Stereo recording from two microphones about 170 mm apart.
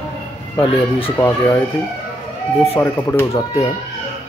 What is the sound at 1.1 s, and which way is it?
Speech, 15° left (ahead or behind).